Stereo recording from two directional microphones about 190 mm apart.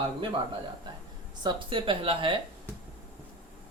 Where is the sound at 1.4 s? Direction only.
25° right (ahead or behind).